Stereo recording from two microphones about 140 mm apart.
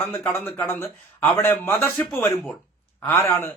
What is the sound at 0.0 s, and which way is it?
A man's voice, 15° left (ahead or behind).